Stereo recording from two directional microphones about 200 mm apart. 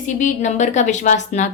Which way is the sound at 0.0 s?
40° left (ahead or behind).